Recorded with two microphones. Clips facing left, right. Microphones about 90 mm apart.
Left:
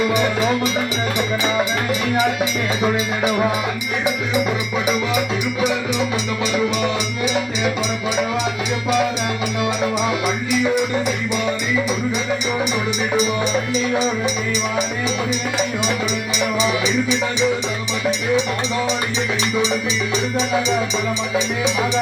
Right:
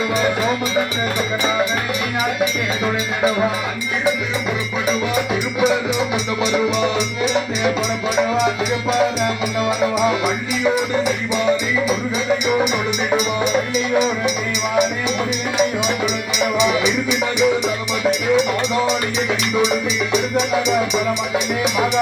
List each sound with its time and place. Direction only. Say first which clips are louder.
0.0 s music: left 1 dB; 15° left (ahead or behind)
2.1 s speech: right 1 dB; 20° left (ahead or behind)
5.6 s speech: right 4 dB; centre (ahead or behind)
9.6 s music: right 3 dB; 30° right (ahead or behind)
10.2 s speech: even; centre (ahead or behind)
13.1 s speech: even; 5° right (ahead or behind)
16.4 s speech: right 3 dB; centre (ahead or behind)
20.1 s speech: right 2 dB; 5° right (ahead or behind)